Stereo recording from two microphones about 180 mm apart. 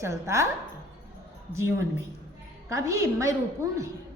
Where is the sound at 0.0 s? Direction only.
15° right (ahead or behind).